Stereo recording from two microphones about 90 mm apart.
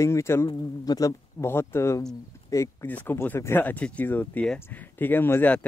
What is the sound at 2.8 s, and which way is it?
Speech, 20° left (ahead or behind).